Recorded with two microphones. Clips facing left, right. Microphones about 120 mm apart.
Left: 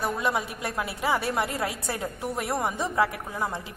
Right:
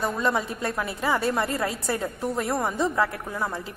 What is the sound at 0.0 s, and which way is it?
A woman's voice, 15° left (ahead or behind).